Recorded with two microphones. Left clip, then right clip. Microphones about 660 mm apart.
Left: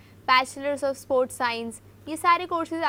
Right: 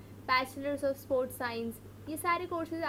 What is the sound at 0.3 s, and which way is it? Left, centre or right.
A woman's voice, left.